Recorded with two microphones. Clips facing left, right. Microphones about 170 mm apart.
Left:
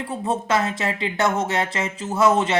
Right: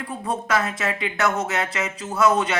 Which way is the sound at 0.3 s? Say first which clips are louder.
Left 2 dB; 25° left (ahead or behind).